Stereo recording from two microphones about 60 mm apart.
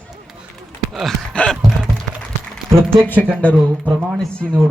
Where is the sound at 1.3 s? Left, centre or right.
Left.